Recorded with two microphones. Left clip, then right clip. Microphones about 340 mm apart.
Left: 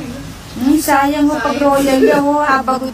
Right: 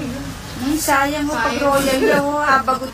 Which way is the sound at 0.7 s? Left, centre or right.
Left.